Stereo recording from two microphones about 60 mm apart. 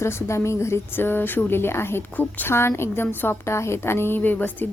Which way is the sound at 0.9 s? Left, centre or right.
Left.